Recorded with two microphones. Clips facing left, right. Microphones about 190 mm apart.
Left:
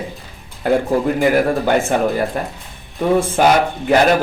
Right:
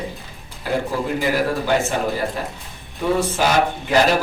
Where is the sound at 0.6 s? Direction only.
55° left (ahead or behind).